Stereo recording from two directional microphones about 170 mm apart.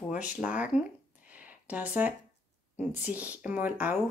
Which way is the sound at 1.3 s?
10° right (ahead or behind).